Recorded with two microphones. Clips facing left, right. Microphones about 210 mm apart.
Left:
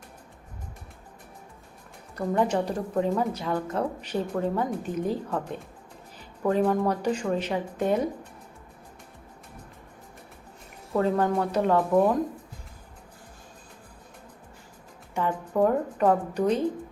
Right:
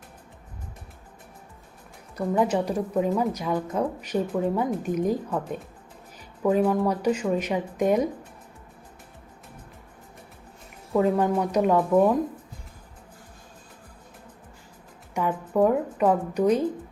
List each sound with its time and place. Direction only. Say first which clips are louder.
2.1 s a woman's voice: right 1 dB; 10° right (ahead or behind)
10.9 s a woman's voice: right 2 dB; 5° right (ahead or behind)
15.1 s a woman's voice: right 2 dB; 10° right (ahead or behind)